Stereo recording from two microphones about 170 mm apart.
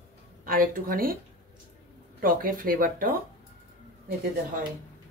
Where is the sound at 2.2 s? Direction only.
55° right (ahead or behind).